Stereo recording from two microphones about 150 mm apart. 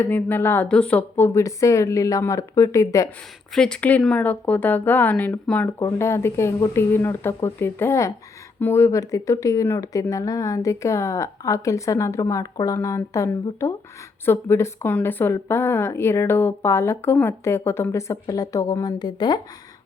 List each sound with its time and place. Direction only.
0.0 s speech: 10° left (ahead or behind)
3.5 s speech: 5° left (ahead or behind); by 19.4 s 30° left (ahead or behind)